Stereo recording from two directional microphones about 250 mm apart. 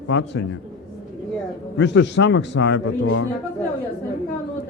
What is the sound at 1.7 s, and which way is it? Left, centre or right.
A man's voice, left.